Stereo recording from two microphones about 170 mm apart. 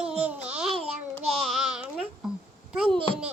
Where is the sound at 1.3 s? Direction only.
Centre (ahead or behind).